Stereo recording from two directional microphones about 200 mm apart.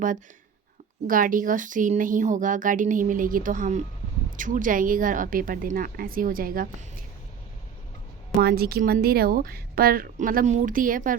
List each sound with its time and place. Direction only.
1.0 s a woman's voice: 45° right (ahead or behind)
8.4 s a woman's voice: 50° right (ahead or behind)